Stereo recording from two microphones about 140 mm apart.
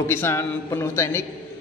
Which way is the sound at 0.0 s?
15° left (ahead or behind).